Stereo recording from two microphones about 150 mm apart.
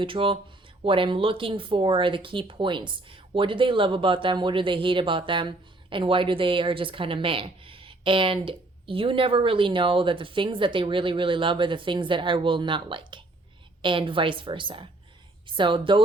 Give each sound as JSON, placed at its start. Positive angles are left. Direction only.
{"t": 0.0, "sound": "speech", "side_deg": -35}